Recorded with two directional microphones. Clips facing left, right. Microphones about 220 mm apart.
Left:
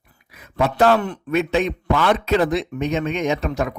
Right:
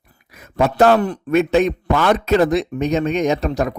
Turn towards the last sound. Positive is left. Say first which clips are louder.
# right 3 dB
turn(degrees=-40)  # may be behind; listen again after turning